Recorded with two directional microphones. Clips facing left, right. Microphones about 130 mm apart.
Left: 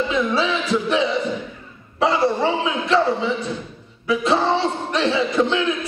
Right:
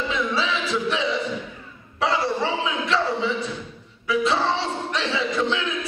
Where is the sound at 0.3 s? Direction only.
50° left (ahead or behind).